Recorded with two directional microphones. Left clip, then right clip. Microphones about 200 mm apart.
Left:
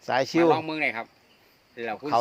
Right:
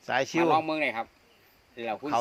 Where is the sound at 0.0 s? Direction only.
30° left (ahead or behind).